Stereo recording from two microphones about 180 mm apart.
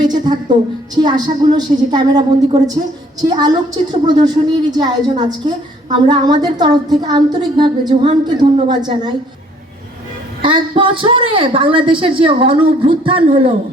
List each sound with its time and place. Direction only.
0.0 s a sound: 25° right (ahead or behind)
0.9 s a woman's voice: 25° right (ahead or behind)
10.4 s a woman's voice: 30° right (ahead or behind)